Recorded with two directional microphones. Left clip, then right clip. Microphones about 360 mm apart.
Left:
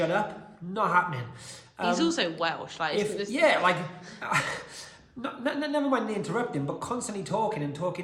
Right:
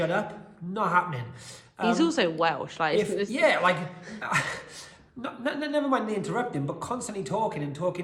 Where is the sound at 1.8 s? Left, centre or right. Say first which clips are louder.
Right 2 dB; centre.